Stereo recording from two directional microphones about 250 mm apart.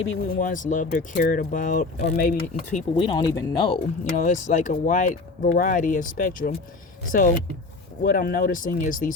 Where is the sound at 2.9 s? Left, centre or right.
Centre.